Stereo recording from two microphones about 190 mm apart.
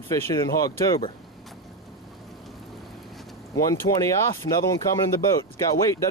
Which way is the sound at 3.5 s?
15° left (ahead or behind).